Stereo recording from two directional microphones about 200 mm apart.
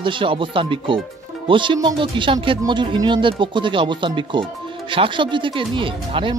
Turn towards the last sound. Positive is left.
turn(degrees=-25)  # may be behind; listen again after turning